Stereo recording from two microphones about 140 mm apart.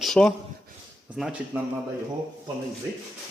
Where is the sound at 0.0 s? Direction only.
5° left (ahead or behind).